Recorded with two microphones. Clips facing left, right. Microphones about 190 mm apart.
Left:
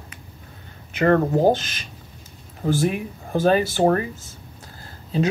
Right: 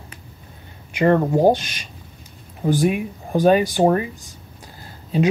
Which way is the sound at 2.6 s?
15° right (ahead or behind).